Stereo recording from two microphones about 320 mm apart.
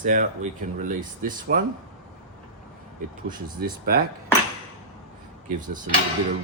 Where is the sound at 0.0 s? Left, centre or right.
Right.